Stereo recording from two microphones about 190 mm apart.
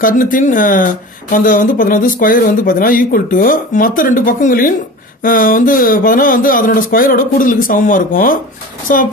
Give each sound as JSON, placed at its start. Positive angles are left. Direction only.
{"t": 0.0, "sound": "speech", "side_deg": 45}